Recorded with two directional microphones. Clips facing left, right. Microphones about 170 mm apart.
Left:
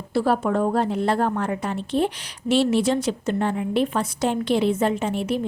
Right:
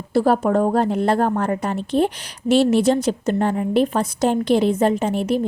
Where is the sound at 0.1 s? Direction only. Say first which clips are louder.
Right 4 dB; 45° right (ahead or behind).